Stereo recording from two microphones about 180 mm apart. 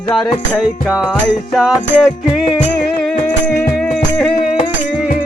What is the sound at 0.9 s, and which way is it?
Music, 5° right (ahead or behind).